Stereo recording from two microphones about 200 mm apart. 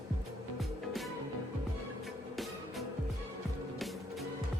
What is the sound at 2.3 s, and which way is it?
Music, centre (ahead or behind).